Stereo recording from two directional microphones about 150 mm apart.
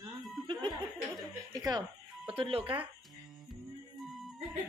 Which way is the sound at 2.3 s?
40° right (ahead or behind).